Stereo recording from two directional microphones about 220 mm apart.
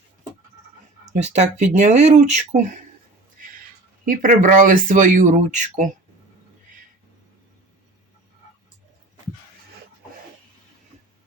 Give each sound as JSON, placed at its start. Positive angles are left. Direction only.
{"t": 1.2, "sound": "speech", "side_deg": -30}
{"t": 4.0, "sound": "speech", "side_deg": -40}